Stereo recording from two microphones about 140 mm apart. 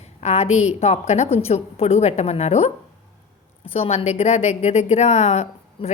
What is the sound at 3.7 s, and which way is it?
A woman's voice, 45° left (ahead or behind).